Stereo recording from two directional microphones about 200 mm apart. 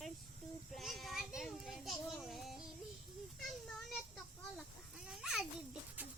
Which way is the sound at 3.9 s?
Centre (ahead or behind).